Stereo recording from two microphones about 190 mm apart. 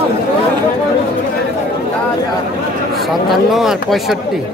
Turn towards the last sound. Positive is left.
turn(degrees=0)  # may be behind; listen again after turning